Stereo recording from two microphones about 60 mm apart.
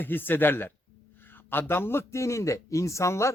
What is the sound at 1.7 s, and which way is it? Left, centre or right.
Speech, left.